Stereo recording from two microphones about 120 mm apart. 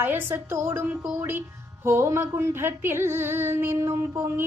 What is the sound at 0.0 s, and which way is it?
A woman's voice, 20° right (ahead or behind).